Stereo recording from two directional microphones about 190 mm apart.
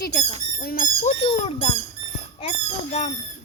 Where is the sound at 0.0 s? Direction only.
55° left (ahead or behind); by 1.7 s 30° left (ahead or behind).